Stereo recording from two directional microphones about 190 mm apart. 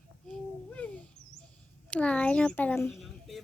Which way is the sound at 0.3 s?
5° left (ahead or behind).